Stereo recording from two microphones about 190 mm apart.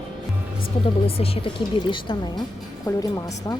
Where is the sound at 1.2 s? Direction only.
25° left (ahead or behind).